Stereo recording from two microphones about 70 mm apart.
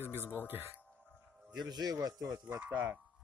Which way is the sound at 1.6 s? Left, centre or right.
Right.